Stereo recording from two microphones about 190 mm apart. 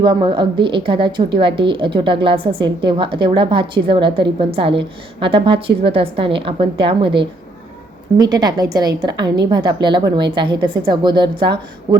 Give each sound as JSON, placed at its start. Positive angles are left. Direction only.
{"t": 0.0, "sound": "a woman's voice", "side_deg": -25}